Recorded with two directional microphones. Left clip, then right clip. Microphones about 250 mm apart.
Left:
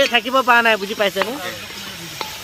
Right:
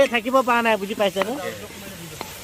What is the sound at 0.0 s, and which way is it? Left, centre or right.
Speech, centre.